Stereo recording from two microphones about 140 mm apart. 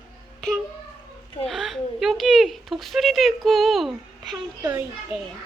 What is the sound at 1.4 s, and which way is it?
Speech, centre (ahead or behind).